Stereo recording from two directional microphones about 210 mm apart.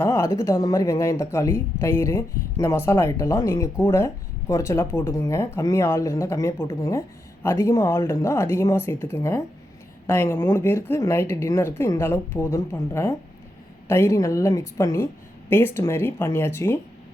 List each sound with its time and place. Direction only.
0.0 s speech: 10° left (ahead or behind)